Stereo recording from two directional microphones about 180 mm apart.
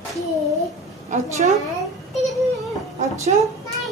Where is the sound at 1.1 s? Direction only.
40° right (ahead or behind).